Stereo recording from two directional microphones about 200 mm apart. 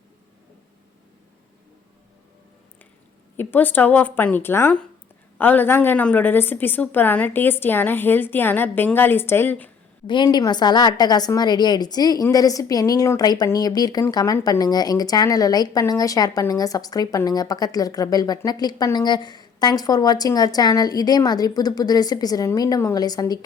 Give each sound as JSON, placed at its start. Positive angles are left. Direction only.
{"t": 3.3, "sound": "a woman's voice", "side_deg": 10}
{"t": 10.1, "sound": "a woman's voice", "side_deg": 20}